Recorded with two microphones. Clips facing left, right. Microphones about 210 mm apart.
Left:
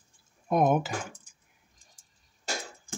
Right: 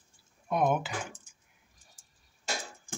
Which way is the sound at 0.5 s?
45° left (ahead or behind).